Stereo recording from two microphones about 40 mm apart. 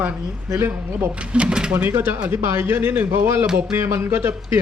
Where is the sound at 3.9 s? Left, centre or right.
Right.